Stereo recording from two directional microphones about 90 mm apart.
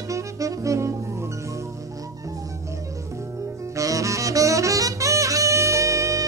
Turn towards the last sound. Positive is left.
turn(degrees=-35)  # may be behind; listen again after turning